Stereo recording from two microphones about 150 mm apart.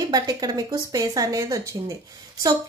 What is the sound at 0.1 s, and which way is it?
A woman's voice, 25° right (ahead or behind).